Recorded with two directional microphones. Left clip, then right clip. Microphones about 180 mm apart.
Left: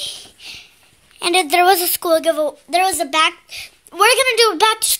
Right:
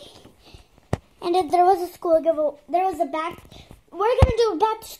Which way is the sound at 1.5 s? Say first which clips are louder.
Left 3 dB; 35° left (ahead or behind).